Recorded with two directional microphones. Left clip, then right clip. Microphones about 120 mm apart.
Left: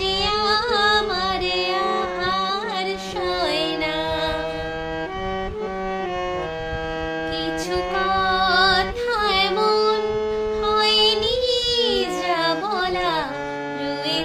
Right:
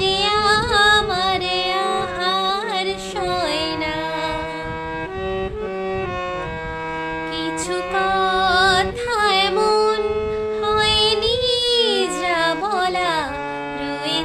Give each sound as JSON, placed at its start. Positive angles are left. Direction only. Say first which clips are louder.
{"t": 0.0, "sound": "music", "louder": "right 3 dB", "side_deg": -35}
{"t": 7.7, "sound": "music", "louder": "right 2 dB", "side_deg": -40}
{"t": 10.6, "sound": "child singing", "louder": "right 1 dB", "side_deg": -30}